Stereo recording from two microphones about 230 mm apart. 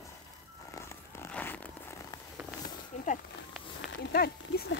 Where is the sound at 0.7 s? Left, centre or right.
Centre.